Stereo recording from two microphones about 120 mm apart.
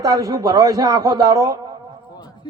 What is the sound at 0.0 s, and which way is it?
A man's voice, 30° right (ahead or behind).